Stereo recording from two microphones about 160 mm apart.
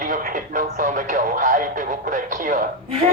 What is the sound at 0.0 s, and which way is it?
Speech, 60° right (ahead or behind).